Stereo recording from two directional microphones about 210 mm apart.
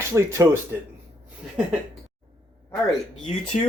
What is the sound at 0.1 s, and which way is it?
Speech, 15° right (ahead or behind).